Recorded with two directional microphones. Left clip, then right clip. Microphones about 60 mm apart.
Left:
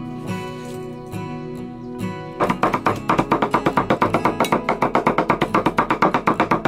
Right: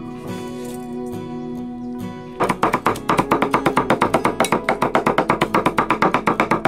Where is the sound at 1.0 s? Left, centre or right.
Left.